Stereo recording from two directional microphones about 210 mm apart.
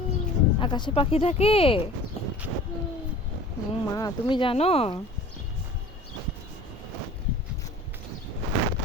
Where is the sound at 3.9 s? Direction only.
20° left (ahead or behind).